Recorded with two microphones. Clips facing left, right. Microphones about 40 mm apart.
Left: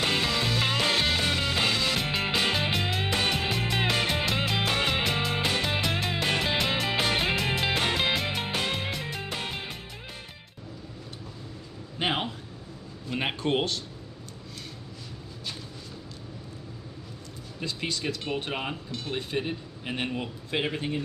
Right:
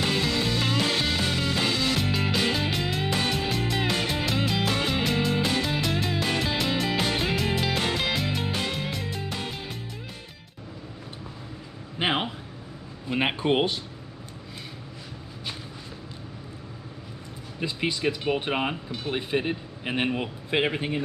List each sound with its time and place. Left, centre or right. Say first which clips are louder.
0.0 s music: right 1 dB; centre
2.0 s music: right 1 dB; centre
6.1 s music: even; centre
12.0 s a sound: right 2 dB; centre
17.6 s speech: right 4 dB; centre